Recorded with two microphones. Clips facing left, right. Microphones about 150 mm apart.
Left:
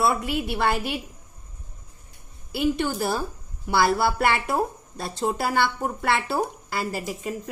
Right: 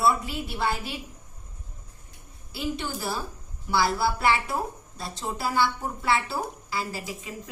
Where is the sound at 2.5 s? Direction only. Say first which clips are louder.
Left 7 dB; 60° left (ahead or behind).